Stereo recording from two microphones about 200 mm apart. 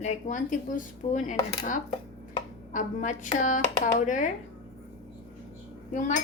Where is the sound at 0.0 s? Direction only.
35° left (ahead or behind).